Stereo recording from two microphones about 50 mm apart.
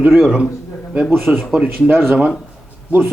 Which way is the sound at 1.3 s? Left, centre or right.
Right.